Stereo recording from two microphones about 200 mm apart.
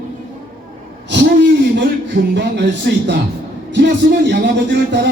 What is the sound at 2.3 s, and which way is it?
A man's voice, 60° right (ahead or behind).